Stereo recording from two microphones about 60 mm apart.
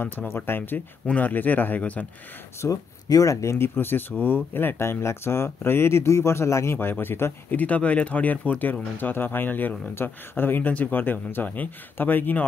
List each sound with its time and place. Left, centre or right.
0.0 s speech: left
2.6 s speech: left
3.5 s speech: left
7.5 s speech: left